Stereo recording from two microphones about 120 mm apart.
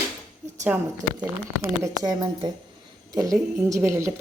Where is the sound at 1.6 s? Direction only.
25° right (ahead or behind).